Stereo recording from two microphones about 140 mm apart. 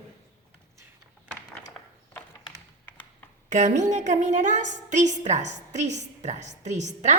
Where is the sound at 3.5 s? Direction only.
65° right (ahead or behind).